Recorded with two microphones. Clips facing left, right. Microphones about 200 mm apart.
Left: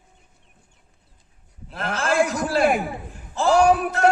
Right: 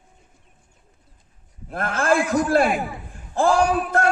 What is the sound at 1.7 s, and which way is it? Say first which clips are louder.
A man's voice: right 1 dB; 55° right (ahead or behind).